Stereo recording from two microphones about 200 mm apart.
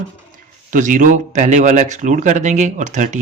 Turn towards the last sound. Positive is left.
turn(degrees=-35)  # may be behind; listen again after turning